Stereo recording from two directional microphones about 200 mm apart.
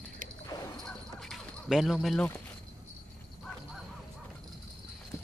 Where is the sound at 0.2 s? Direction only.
40° right (ahead or behind).